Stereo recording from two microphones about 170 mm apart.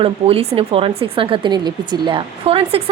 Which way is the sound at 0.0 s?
35° right (ahead or behind).